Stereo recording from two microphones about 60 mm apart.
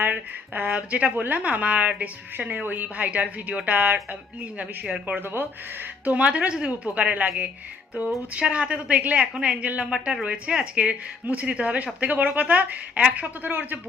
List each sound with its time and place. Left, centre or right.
0.0 s a woman's voice: right
5.2 s speech: right
6.1 s a woman's voice: right